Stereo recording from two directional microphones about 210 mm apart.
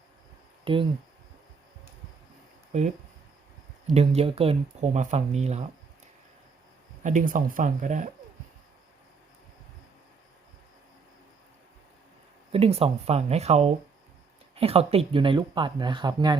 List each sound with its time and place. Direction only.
0.6 s speech: 25° right (ahead or behind)
3.8 s speech: 30° right (ahead or behind)
7.0 s speech: 40° right (ahead or behind)
12.5 s speech: 30° right (ahead or behind)